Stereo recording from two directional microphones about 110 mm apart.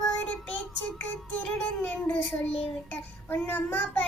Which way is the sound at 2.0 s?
15° left (ahead or behind).